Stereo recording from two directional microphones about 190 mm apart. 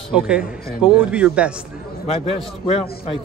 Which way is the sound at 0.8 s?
5° right (ahead or behind).